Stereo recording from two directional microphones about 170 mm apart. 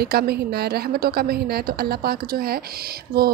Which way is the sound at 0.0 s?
65° right (ahead or behind).